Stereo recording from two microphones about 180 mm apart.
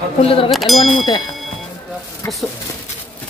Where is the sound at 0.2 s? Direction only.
30° left (ahead or behind).